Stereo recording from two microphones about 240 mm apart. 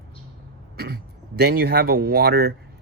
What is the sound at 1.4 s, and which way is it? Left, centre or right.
Speech, right.